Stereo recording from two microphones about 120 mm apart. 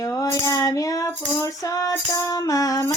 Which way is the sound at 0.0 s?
25° left (ahead or behind).